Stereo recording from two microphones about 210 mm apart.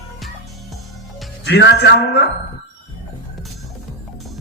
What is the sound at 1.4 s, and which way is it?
Speech, 55° left (ahead or behind).